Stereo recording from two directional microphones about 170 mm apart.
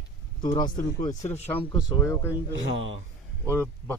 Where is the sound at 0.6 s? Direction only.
50° left (ahead or behind).